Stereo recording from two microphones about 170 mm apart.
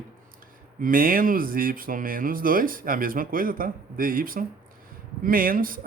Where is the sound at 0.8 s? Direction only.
55° right (ahead or behind).